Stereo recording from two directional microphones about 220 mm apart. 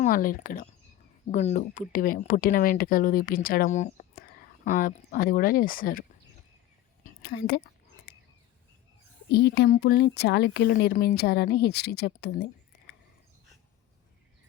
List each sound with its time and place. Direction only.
0.0 s speech: 40° left (ahead or behind)
7.2 s speech: 45° left (ahead or behind)
8.1 s a sound: 50° left (ahead or behind)
9.3 s speech: 50° left (ahead or behind)